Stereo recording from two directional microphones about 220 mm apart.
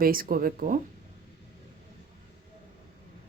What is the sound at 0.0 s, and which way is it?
Speech, 40° right (ahead or behind).